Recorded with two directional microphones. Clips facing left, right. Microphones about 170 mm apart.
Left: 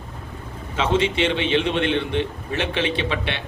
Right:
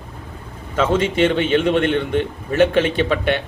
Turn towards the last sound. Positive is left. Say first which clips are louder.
# right 6 dB
turn(degrees=-45)  # may be behind; listen again after turning